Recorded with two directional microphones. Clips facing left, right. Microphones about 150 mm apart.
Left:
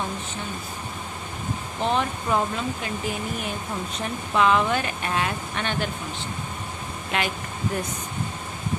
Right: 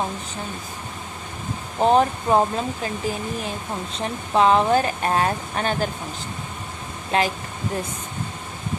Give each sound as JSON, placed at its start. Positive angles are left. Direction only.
{"t": 1.8, "sound": "speech", "side_deg": -40}
{"t": 7.1, "sound": "speech", "side_deg": -35}